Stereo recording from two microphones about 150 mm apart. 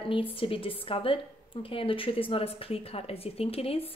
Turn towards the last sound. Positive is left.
turn(degrees=40)  # may be behind; listen again after turning